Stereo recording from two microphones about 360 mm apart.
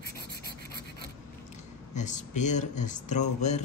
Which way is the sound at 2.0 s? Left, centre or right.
Centre.